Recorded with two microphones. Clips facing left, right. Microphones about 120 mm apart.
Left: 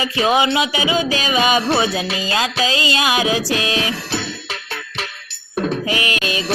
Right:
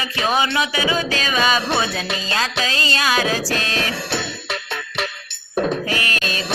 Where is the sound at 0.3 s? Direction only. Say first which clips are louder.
Left 3 dB; 15° left (ahead or behind).